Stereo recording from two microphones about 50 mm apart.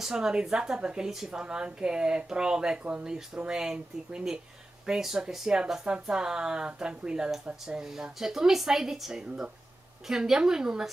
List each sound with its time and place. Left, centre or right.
0.0 s speech: centre